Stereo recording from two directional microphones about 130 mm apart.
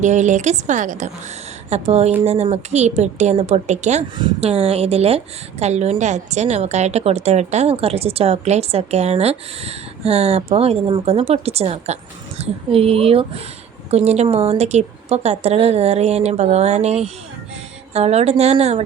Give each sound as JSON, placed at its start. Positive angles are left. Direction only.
{"t": 0.0, "sound": "speech", "side_deg": -65}
{"t": 1.7, "sound": "a woman's voice", "side_deg": -55}